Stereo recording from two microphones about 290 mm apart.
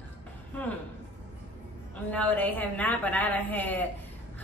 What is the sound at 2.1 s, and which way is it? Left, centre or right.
A woman's voice, centre.